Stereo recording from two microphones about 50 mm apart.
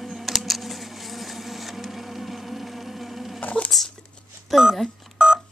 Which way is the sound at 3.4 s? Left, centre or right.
Left.